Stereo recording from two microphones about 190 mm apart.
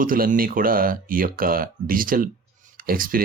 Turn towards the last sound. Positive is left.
turn(degrees=-50)  # may be behind; listen again after turning